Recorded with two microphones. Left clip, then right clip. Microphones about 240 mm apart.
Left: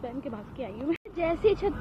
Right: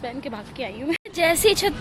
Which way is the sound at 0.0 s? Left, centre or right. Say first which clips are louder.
Right 5 dB; centre.